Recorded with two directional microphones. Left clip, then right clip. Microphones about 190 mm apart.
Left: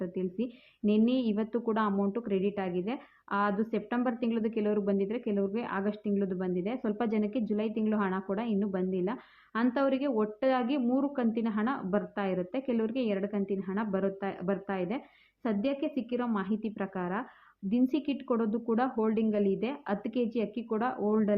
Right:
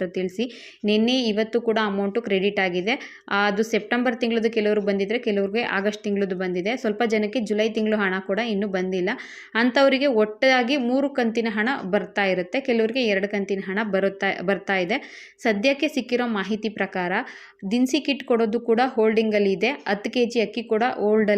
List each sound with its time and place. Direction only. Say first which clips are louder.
0.0 s speech: right 9 dB; 15° right (ahead or behind)